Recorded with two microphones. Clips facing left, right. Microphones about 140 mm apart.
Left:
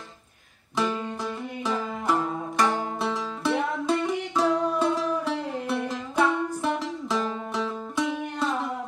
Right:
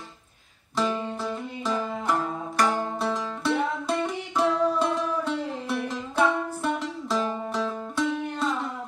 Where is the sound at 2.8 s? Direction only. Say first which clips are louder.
Right 1 dB; centre (ahead or behind).